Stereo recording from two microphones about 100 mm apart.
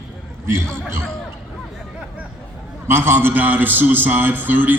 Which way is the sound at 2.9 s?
20° right (ahead or behind).